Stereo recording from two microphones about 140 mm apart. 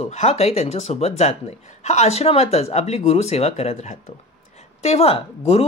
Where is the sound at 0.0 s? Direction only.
50° left (ahead or behind).